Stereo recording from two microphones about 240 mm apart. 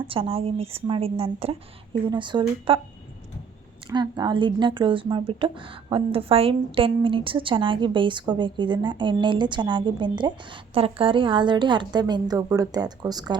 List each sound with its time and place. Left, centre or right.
0.1 s speech: right
3.8 s speech: centre